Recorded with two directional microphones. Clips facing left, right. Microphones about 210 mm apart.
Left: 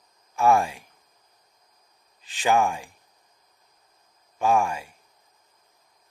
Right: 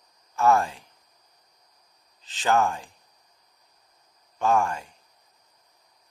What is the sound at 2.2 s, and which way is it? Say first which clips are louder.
Speech: left 1 dB; 10° left (ahead or behind).